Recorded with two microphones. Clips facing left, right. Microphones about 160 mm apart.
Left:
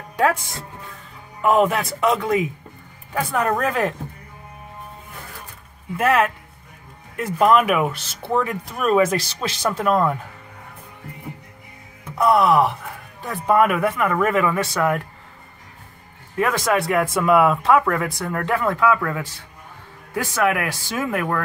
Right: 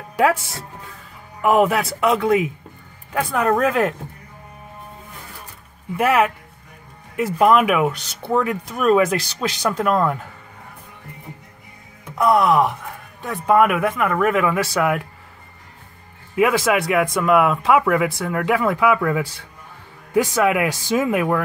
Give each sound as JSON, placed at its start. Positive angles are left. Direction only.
{"t": 1.4, "sound": "speech", "side_deg": -5}
{"t": 5.9, "sound": "speech", "side_deg": -10}
{"t": 12.2, "sound": "speech", "side_deg": 0}
{"t": 16.3, "sound": "speech", "side_deg": -5}